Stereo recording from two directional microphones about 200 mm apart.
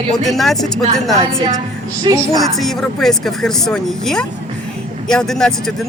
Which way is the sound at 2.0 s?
20° right (ahead or behind).